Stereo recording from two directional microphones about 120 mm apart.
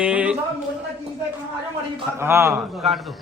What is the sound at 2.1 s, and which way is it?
Speech, 20° right (ahead or behind).